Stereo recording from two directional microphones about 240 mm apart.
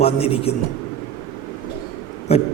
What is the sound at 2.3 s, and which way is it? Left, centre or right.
Mantra, left.